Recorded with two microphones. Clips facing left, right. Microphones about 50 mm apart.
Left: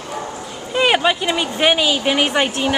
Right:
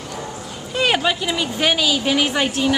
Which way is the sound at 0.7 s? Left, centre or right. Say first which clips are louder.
Left 3 dB; centre.